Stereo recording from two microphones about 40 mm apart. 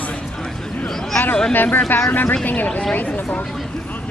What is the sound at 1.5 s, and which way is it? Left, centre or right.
Speech, left.